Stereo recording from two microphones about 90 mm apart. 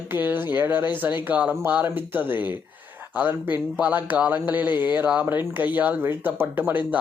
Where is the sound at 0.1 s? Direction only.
20° right (ahead or behind).